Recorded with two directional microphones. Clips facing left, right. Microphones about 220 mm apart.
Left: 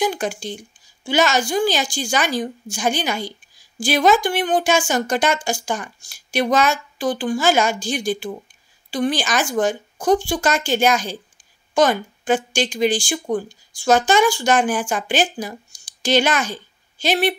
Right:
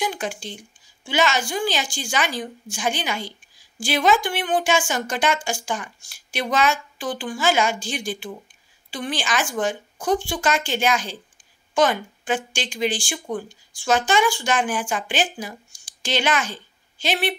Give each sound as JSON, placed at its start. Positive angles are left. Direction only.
{"t": 0.0, "sound": "a woman's voice", "side_deg": 40}